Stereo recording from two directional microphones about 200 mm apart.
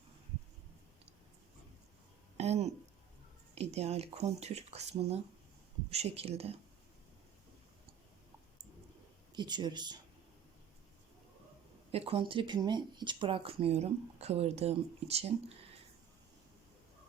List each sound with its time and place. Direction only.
2.4 s a sound: 30° right (ahead or behind)
3.5 s speech: 30° right (ahead or behind)
9.3 s speech: 20° right (ahead or behind)
11.9 s speech: 30° right (ahead or behind)